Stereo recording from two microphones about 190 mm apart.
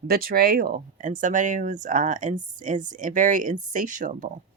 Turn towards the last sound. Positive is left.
turn(degrees=-45)  # may be behind; listen again after turning